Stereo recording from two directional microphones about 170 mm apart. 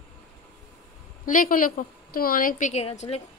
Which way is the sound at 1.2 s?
55° left (ahead or behind).